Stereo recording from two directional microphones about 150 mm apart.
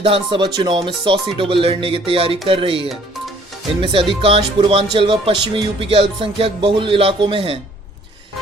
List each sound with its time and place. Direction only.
0.0 s speech: 35° right (ahead or behind)
4.2 s speech: 40° right (ahead or behind)